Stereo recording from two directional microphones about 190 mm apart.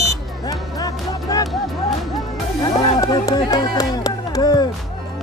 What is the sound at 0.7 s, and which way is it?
Music, 20° left (ahead or behind).